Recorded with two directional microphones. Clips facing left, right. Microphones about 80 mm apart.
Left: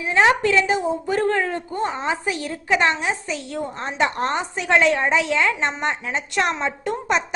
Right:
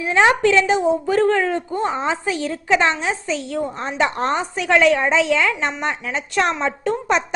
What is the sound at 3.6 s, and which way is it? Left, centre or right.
Speech, right.